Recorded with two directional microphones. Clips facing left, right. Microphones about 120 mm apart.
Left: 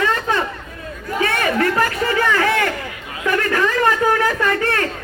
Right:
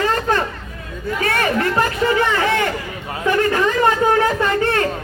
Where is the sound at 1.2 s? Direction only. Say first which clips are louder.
Left 1 dB; 35° right (ahead or behind).